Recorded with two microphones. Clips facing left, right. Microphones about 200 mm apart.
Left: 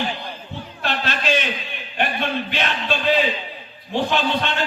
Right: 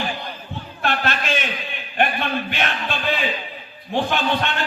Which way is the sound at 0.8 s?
50° right (ahead or behind).